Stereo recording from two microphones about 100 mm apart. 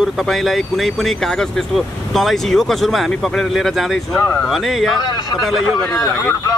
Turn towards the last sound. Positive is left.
turn(degrees=0)  # may be behind; listen again after turning